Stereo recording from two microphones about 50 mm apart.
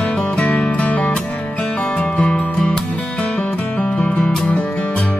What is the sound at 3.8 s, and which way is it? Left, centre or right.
Music, left.